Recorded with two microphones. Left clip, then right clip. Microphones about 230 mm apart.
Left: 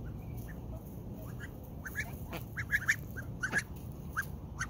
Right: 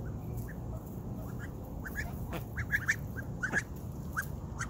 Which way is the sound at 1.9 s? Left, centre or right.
Centre.